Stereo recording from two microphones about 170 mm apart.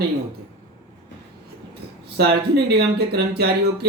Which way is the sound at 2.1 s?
75° right (ahead or behind).